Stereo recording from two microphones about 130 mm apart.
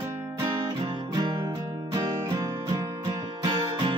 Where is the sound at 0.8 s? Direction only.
35° right (ahead or behind).